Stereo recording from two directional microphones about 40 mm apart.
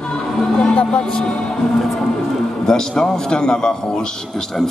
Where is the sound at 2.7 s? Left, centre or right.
Centre.